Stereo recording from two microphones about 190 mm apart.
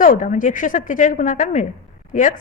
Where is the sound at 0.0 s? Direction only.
45° left (ahead or behind).